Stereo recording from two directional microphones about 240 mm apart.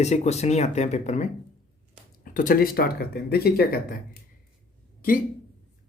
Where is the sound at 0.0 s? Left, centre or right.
Left.